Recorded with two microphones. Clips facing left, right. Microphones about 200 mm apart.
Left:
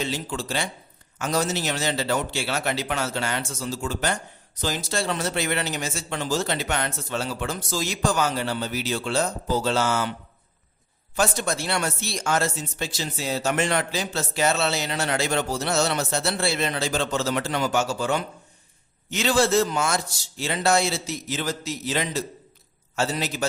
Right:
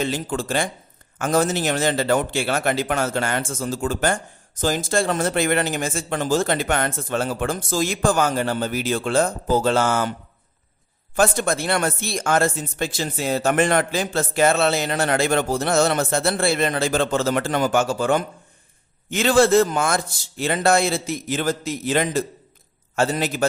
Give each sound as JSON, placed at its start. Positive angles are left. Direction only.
{"t": 0.0, "sound": "a man's voice", "side_deg": -50}